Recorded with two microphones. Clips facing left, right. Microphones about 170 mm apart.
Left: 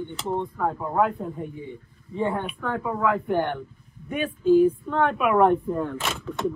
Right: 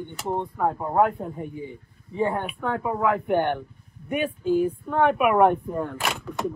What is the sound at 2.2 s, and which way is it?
Speech, 5° right (ahead or behind).